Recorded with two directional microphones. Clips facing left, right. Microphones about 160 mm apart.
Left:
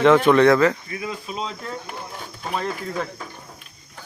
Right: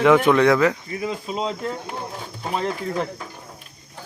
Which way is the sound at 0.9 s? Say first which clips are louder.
Right 3 dB; 30° right (ahead or behind).